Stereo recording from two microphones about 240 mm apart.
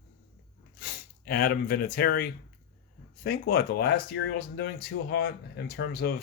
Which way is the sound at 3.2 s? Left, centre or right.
Left.